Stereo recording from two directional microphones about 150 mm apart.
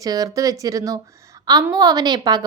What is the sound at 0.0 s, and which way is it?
A woman's voice, 25° right (ahead or behind).